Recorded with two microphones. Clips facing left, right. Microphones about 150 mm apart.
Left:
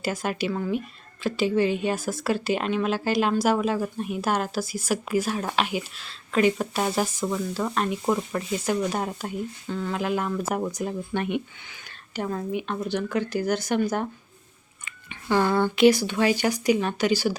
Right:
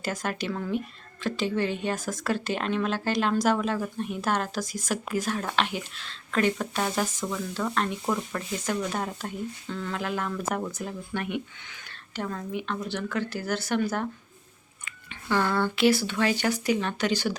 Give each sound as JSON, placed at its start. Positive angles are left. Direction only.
{"t": 0.0, "sound": "speech", "side_deg": 10}
{"t": 11.7, "sound": "speech", "side_deg": 15}